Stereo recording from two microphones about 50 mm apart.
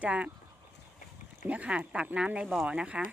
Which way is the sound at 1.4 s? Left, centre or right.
Right.